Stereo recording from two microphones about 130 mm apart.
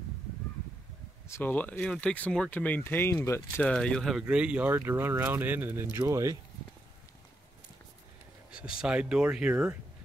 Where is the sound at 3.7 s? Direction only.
5° left (ahead or behind).